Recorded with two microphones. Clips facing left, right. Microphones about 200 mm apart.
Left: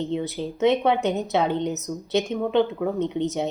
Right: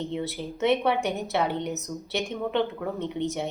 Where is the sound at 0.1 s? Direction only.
20° left (ahead or behind).